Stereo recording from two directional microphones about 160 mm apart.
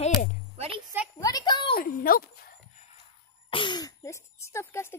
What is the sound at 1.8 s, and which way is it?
Speech, 65° left (ahead or behind).